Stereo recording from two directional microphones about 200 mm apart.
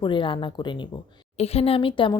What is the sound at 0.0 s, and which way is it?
Speech, 25° left (ahead or behind).